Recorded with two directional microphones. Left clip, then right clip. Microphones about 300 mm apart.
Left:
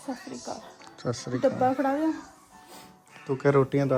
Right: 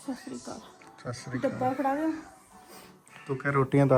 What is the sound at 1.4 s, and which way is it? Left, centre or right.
Speech, left.